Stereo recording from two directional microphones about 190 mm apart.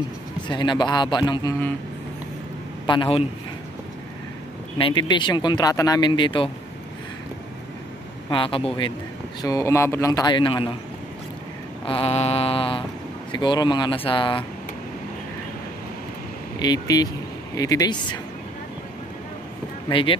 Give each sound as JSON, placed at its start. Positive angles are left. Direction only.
{"t": 0.5, "sound": "speech", "side_deg": 25}
{"t": 2.9, "sound": "speech", "side_deg": 30}
{"t": 4.7, "sound": "speech", "side_deg": 25}
{"t": 8.3, "sound": "speech", "side_deg": 30}
{"t": 11.8, "sound": "speech", "side_deg": 30}
{"t": 16.5, "sound": "speech", "side_deg": 20}
{"t": 19.9, "sound": "speech", "side_deg": 25}